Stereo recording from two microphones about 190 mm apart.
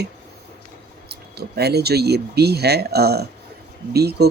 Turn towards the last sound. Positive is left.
turn(degrees=-55)  # may be behind; listen again after turning